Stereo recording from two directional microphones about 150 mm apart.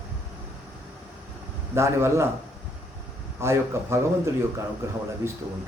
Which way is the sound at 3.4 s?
15° right (ahead or behind).